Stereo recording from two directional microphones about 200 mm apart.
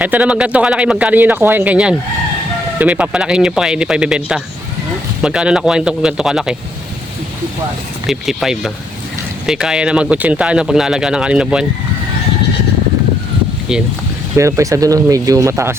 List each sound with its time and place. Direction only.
0.0 s speech: 5° right (ahead or behind)
8.0 s speech: centre (ahead or behind)
14.3 s speech: 15° right (ahead or behind)